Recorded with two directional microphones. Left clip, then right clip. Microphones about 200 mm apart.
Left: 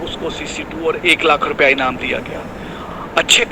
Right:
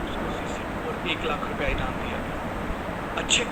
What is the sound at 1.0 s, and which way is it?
Speech, 45° left (ahead or behind).